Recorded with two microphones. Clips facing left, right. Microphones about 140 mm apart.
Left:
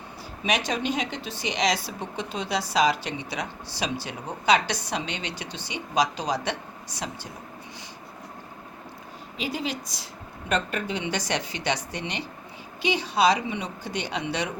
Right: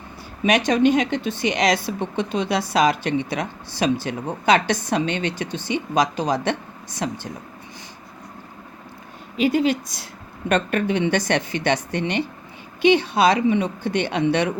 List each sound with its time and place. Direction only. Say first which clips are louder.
0.4 s speech: right 9 dB; 50° right (ahead or behind)
9.4 s speech: right 11 dB; 55° right (ahead or behind)